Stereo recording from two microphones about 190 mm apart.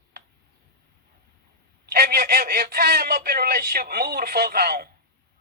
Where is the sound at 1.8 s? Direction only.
55° right (ahead or behind).